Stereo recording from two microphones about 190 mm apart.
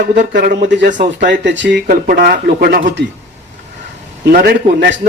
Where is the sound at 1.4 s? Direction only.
70° right (ahead or behind).